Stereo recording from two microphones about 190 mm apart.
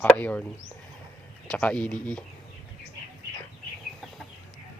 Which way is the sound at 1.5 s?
5° left (ahead or behind).